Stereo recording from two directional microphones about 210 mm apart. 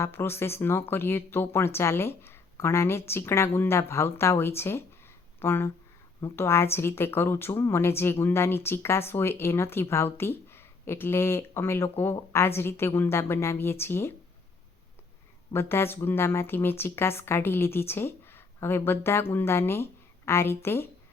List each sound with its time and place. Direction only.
0.0 s speech: 10° left (ahead or behind)
15.5 s speech: 10° left (ahead or behind)